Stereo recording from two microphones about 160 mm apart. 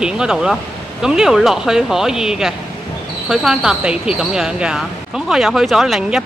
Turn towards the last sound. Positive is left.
turn(degrees=0)  # may be behind; listen again after turning